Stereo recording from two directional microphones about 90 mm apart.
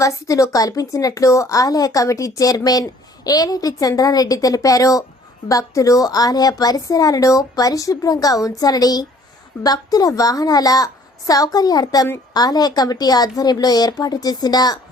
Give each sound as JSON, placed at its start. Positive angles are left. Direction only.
{"t": 0.0, "sound": "a woman's voice", "side_deg": 35}